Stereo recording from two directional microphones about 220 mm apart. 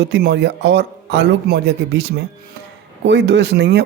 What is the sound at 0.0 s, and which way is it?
Speech, 50° right (ahead or behind).